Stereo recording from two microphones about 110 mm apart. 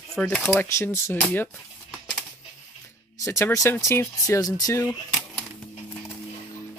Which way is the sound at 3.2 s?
25° left (ahead or behind).